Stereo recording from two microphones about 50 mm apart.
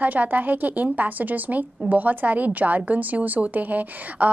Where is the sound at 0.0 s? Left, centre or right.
Right.